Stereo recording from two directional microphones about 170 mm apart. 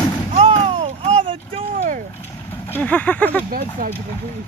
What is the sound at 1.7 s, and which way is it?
Vehicle, 50° right (ahead or behind).